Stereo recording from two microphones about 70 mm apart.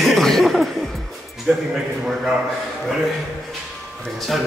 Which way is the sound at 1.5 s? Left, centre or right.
Centre.